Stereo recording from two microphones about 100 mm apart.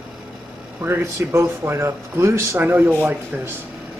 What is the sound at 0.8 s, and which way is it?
Speech, 25° right (ahead or behind).